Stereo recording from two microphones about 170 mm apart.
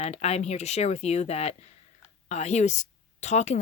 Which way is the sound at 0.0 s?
40° left (ahead or behind).